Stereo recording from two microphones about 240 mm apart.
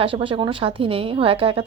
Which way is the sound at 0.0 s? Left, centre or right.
Right.